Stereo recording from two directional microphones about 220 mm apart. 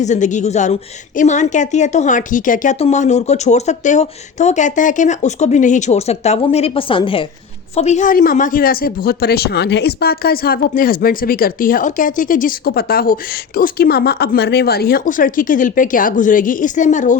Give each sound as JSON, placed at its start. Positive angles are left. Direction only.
{"t": 0.0, "sound": "speech", "side_deg": 35}